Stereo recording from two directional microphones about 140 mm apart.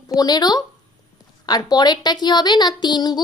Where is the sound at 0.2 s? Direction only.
30° left (ahead or behind).